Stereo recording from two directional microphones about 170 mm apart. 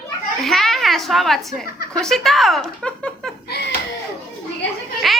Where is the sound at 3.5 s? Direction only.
70° left (ahead or behind).